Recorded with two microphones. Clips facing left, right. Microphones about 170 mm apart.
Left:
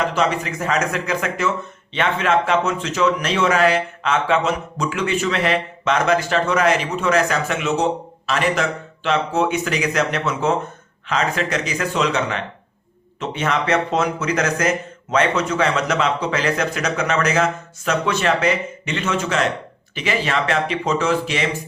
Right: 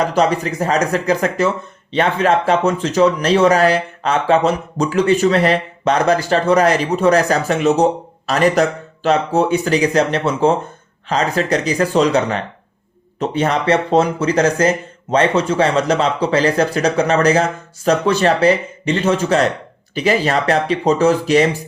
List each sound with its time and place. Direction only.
0.0 s speech: 35° right (ahead or behind)